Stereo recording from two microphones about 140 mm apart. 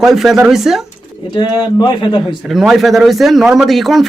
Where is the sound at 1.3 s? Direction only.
35° left (ahead or behind).